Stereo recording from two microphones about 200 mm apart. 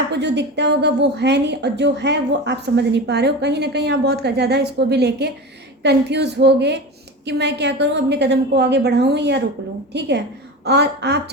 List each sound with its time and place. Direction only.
0.1 s a woman's voice: 60° right (ahead or behind)